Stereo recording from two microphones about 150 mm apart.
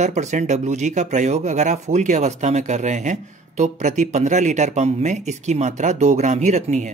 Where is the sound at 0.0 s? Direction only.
50° right (ahead or behind).